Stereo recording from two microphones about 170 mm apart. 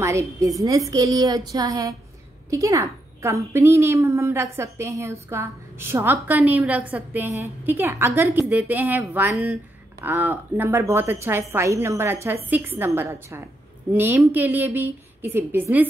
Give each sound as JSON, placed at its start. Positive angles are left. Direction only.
{"t": 0.0, "sound": "a woman's voice", "side_deg": -15}